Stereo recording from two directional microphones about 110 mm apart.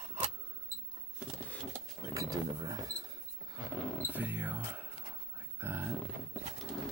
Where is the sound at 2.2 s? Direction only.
30° right (ahead or behind).